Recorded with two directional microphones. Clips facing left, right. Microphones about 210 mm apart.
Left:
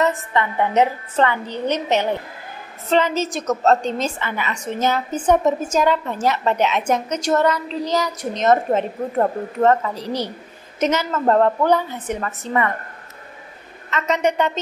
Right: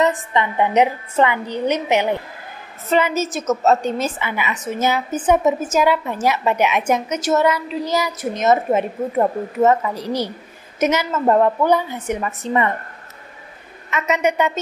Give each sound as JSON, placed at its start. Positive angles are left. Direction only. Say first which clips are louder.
{"t": 0.0, "sound": "a woman's voice", "louder": "right 1 dB", "side_deg": -15}
{"t": 13.8, "sound": "a woman's voice", "louder": "right 1 dB", "side_deg": -10}